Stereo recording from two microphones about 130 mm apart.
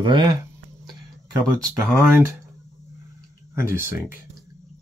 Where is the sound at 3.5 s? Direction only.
20° right (ahead or behind).